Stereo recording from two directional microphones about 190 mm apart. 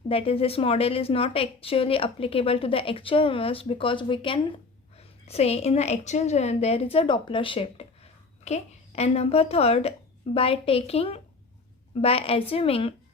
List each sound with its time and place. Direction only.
0.1 s a woman's voice: 30° left (ahead or behind)